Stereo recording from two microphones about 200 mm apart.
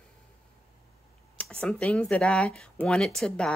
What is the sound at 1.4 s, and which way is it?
Speech, 5° left (ahead or behind).